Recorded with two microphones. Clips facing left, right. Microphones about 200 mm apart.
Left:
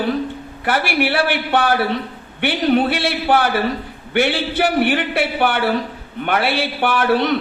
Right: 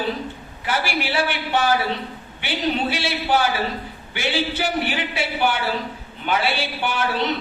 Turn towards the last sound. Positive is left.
turn(degrees=60)  # may be behind; listen again after turning